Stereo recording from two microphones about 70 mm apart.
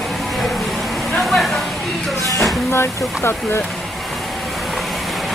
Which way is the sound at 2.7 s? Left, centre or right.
Left.